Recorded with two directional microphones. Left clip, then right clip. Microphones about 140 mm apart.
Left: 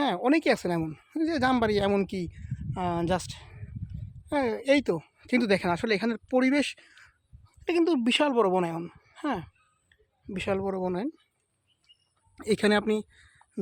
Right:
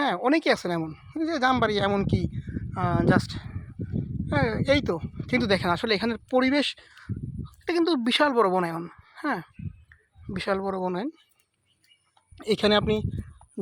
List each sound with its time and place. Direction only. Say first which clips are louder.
0.0 s speech: right 2 dB; 20° left (ahead or behind)
5.5 s speech: right 2 dB; 20° left (ahead or behind)
12.4 s speech: right 2 dB; 25° left (ahead or behind)